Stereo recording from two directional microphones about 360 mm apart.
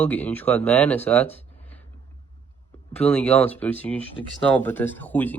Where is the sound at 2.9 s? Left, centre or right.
Centre.